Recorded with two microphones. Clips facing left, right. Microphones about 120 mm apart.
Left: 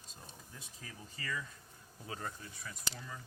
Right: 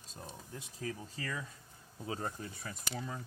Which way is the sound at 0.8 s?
35° right (ahead or behind).